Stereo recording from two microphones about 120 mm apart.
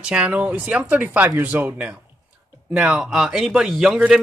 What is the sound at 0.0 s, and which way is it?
Speech, 10° right (ahead or behind).